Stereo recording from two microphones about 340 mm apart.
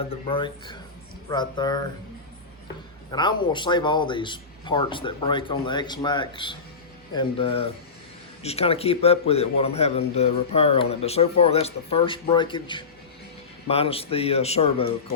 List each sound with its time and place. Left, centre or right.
0.3 s speech: centre
3.1 s speech: centre